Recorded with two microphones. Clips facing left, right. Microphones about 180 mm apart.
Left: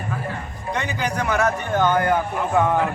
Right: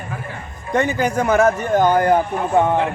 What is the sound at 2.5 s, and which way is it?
Speech, 25° right (ahead or behind).